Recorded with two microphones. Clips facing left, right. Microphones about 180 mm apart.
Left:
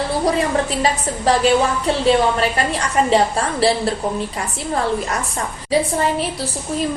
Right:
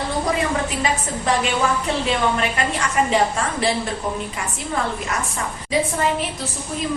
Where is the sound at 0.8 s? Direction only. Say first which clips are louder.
Left 3 dB; 35° left (ahead or behind).